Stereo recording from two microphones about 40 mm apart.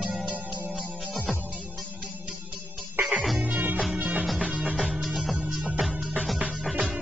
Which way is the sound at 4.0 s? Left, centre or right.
Right.